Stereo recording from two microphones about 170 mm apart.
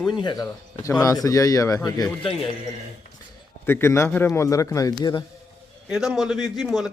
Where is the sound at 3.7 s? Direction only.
15° left (ahead or behind).